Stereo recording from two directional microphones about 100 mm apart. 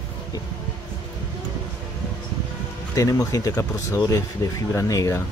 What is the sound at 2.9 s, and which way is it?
Speech, 35° left (ahead or behind).